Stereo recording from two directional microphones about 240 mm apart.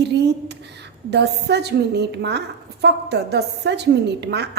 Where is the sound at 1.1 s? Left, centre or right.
Right.